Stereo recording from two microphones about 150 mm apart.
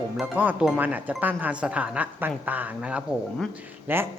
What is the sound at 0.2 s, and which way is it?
Speech, 10° right (ahead or behind).